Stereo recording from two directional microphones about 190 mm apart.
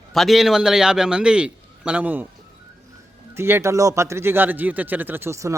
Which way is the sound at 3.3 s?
15° right (ahead or behind).